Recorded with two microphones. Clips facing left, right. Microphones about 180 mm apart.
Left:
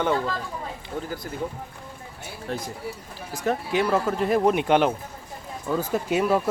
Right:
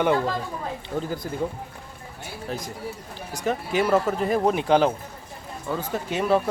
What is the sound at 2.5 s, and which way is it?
Speech, centre (ahead or behind).